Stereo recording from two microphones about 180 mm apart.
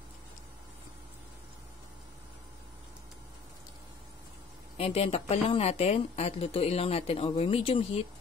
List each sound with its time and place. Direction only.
4.7 s speech: 35° left (ahead or behind)